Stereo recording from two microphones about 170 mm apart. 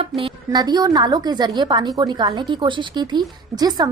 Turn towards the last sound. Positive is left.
turn(degrees=-25)  # may be behind; listen again after turning